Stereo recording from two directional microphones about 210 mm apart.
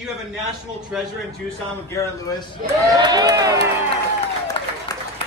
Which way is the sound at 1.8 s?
15° left (ahead or behind).